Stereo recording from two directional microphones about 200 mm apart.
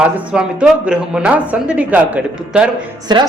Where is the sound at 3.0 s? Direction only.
20° right (ahead or behind).